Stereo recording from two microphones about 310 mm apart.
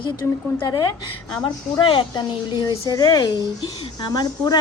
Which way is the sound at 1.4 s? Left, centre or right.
Centre.